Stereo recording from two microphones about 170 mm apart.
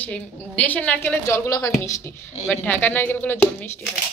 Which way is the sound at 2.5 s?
10° left (ahead or behind).